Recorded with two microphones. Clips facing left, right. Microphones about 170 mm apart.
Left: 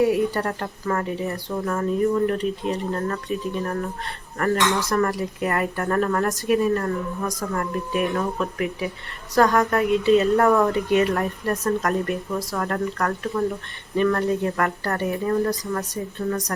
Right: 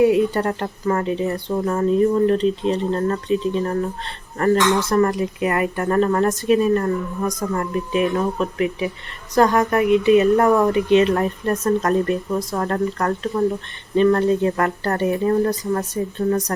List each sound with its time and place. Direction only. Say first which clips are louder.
0.0 s speech: right 4 dB; 20° right (ahead or behind)
12.5 s a woman's voice: right 2 dB; 35° right (ahead or behind)
13.0 s speech: right 4 dB; 20° right (ahead or behind)
14.6 s a woman's voice: right 4 dB; 30° right (ahead or behind)
15.7 s a woman's voice: right 5 dB; 35° right (ahead or behind)